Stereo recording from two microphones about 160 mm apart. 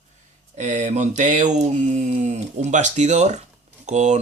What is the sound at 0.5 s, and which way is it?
Speech, 45° right (ahead or behind).